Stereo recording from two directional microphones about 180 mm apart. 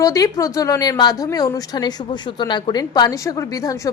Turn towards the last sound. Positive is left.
turn(degrees=20)  # may be behind; listen again after turning